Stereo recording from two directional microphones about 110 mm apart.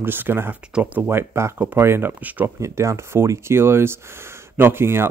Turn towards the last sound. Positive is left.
turn(degrees=-20)  # may be behind; listen again after turning